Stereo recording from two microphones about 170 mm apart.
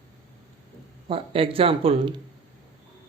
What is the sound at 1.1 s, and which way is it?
Speech, 35° right (ahead or behind).